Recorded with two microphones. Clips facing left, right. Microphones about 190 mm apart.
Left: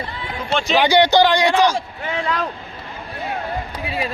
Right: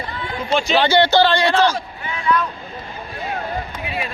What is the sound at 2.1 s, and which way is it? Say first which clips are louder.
Speech: right 4 dB; 65° left (ahead or behind).